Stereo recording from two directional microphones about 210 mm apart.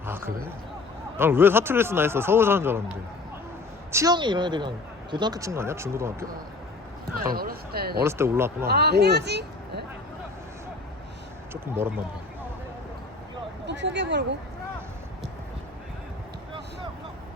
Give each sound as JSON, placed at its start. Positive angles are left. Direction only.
{"t": 0.0, "sound": "a sound", "side_deg": -10}
{"t": 1.1, "sound": "a man's voice", "side_deg": -10}
{"t": 7.2, "sound": "speech", "side_deg": -45}
{"t": 8.0, "sound": "a man's voice", "side_deg": -10}
{"t": 8.6, "sound": "speech", "side_deg": -50}
{"t": 11.5, "sound": "a man's voice", "side_deg": -10}
{"t": 13.7, "sound": "speech", "side_deg": -60}